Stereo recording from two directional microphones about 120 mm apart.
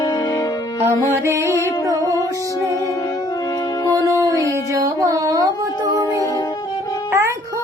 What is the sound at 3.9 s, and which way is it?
Music, 30° right (ahead or behind).